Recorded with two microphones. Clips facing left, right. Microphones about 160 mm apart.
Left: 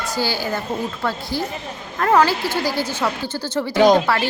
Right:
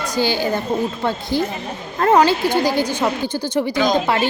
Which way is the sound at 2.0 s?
20° right (ahead or behind).